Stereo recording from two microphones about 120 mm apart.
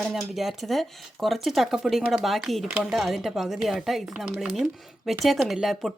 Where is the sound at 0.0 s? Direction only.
Centre (ahead or behind).